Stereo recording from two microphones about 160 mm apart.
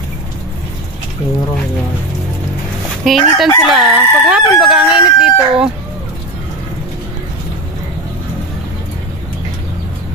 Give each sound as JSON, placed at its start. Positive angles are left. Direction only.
{"t": 3.0, "sound": "speech", "side_deg": 0}